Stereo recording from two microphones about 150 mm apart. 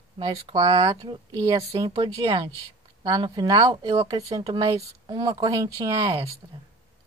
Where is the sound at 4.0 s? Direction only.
25° right (ahead or behind).